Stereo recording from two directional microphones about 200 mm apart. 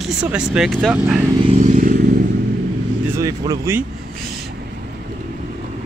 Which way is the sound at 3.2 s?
15° right (ahead or behind).